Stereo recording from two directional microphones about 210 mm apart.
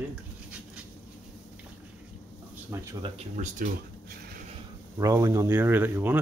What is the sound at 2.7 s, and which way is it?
Speech, 15° right (ahead or behind).